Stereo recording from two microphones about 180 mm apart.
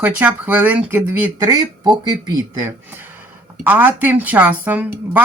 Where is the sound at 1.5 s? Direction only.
25° right (ahead or behind).